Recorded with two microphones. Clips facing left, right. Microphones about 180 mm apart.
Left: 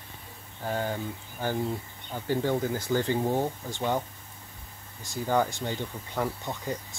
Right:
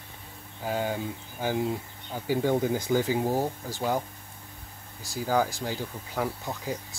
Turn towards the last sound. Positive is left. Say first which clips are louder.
# even
turn(degrees=-5)  # may be behind; listen again after turning